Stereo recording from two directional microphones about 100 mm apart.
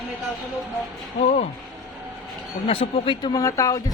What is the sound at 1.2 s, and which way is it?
Speech, 90° left.